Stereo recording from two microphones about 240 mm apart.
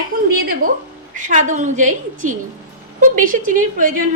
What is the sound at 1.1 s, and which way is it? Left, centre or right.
Speech, right.